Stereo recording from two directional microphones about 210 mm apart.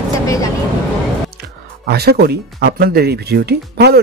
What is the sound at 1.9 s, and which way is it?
Speech, 50° right (ahead or behind).